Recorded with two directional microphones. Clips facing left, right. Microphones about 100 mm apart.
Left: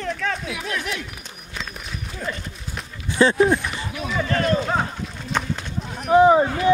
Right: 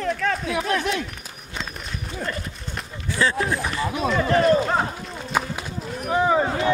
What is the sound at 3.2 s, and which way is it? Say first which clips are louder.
Speech: left 5 dB; 25° left (ahead or behind).